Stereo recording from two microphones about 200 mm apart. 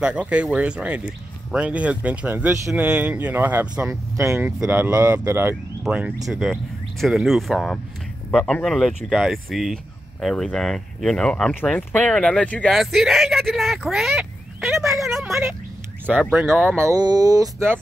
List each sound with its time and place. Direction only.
0.0 s speech: 5° right (ahead or behind)
16.7 s speech: 15° right (ahead or behind)